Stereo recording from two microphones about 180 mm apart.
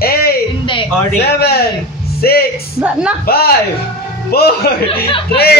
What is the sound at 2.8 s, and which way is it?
Speech, 5° right (ahead or behind).